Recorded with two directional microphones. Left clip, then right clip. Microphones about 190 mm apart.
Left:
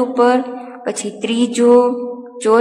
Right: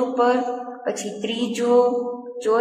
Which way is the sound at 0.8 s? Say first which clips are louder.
Left 6 dB; 40° left (ahead or behind).